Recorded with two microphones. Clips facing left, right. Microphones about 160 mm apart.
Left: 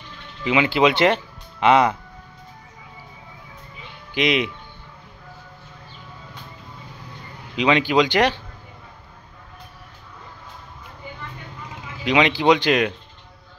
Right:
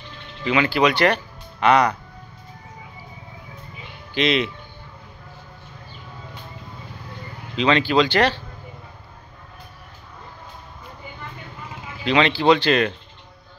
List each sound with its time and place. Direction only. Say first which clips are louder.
0.4 s speech: left 1 dB; 15° left (ahead or behind)
4.1 s speech: even; 15° left (ahead or behind)
7.5 s speech: even; 15° left (ahead or behind)
12.0 s speech: even; 15° left (ahead or behind)